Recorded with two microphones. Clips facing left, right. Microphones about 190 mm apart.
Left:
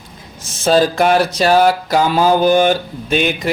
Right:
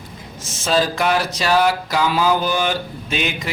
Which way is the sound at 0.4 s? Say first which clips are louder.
Left 6 dB; 55° left (ahead or behind).